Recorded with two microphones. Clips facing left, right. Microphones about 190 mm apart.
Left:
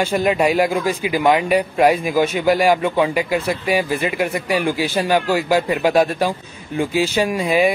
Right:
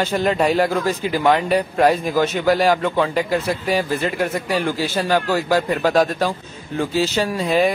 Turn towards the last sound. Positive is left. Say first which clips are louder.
# left 1 dB
turn(degrees=10)  # may be behind; listen again after turning